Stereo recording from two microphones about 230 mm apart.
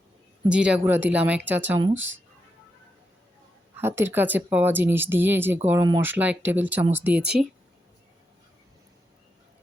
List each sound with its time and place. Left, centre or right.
0.4 s speech: centre
2.0 s speech: right
3.8 s speech: centre